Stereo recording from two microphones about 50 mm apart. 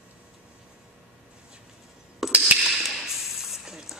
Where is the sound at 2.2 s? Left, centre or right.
Centre.